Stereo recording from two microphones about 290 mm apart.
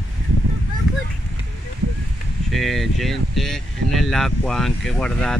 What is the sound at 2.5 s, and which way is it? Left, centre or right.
Speech, centre.